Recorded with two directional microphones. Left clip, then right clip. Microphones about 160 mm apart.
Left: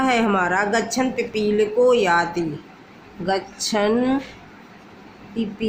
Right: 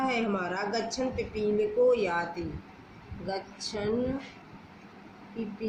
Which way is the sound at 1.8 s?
45° left (ahead or behind).